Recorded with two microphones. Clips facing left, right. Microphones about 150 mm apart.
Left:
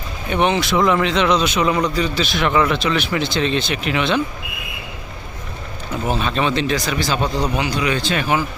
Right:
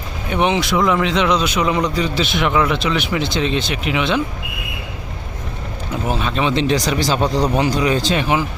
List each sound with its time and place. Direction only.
0.3 s speech: 15° right (ahead or behind)
2.5 s speech: 10° right (ahead or behind)
6.1 s speech: 10° right (ahead or behind)
6.5 s speech: 25° right (ahead or behind)
8.2 s speech: 20° right (ahead or behind)